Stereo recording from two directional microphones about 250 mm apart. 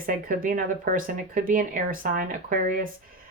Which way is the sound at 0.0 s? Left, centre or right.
Right.